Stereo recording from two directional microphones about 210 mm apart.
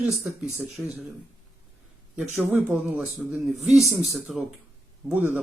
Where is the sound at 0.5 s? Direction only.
5° right (ahead or behind).